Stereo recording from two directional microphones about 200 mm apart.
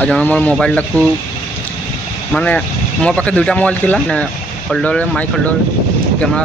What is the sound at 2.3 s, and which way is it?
Speech, 5° left (ahead or behind).